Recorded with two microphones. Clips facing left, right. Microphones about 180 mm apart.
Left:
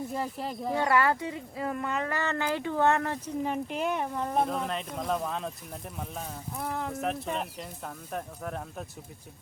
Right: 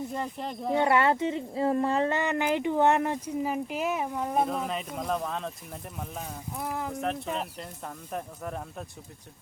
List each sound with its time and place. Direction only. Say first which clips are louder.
0.1 s speech: even; 5° left (ahead or behind)
0.7 s speech: right 2 dB; 25° right (ahead or behind)
3.4 s speech: left 1 dB; 5° right (ahead or behind)